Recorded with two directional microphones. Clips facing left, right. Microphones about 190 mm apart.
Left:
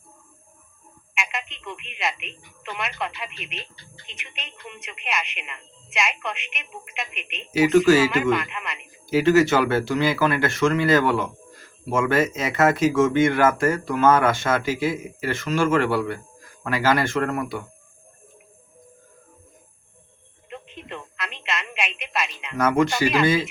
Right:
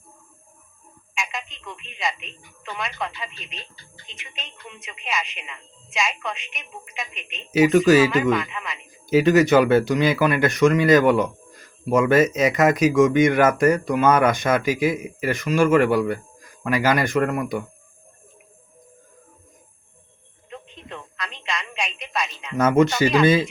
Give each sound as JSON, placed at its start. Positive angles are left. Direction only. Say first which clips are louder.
{"t": 1.1, "sound": "telephone", "louder": "even", "side_deg": 0}
{"t": 2.0, "sound": "a woman's voice", "louder": "right 1 dB", "side_deg": 5}
{"t": 7.5, "sound": "speech", "louder": "right 1 dB", "side_deg": -20}
{"t": 8.1, "sound": "a woman's voice", "louder": "right 1 dB", "side_deg": 0}
{"t": 9.0, "sound": "speech", "louder": "right 1 dB", "side_deg": -20}
{"t": 20.5, "sound": "telephone", "louder": "left 1 dB", "side_deg": 5}
{"t": 22.5, "sound": "speech", "louder": "right 3 dB", "side_deg": -20}